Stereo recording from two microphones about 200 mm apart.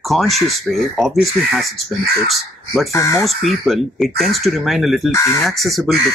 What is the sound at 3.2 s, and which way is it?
Speech, centre (ahead or behind).